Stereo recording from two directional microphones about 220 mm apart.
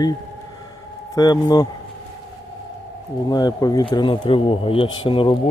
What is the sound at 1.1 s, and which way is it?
Speech, 15° left (ahead or behind).